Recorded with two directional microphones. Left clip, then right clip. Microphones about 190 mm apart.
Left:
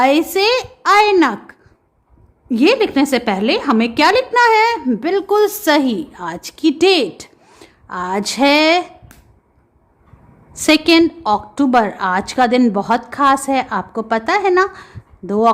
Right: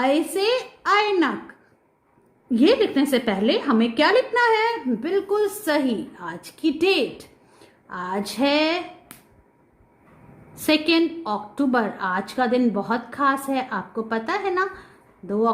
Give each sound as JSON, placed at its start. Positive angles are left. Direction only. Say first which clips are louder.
{"t": 0.0, "sound": "a woman's voice", "louder": "left 8 dB", "side_deg": 35}
{"t": 10.5, "sound": "a woman's voice", "louder": "left 8 dB", "side_deg": 30}